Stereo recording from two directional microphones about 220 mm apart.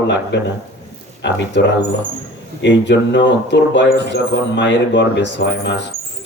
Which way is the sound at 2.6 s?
50° left (ahead or behind).